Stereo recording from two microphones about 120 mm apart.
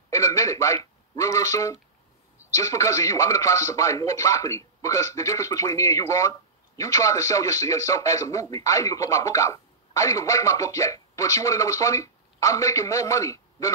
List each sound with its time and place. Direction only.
0.1 s a man's voice: 25° left (ahead or behind)